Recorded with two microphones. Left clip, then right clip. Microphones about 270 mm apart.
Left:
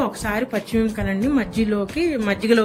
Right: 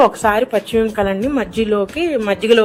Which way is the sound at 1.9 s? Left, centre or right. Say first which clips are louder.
Right 4 dB; right.